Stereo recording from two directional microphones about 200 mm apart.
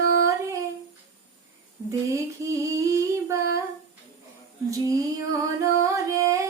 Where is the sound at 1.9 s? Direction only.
15° right (ahead or behind).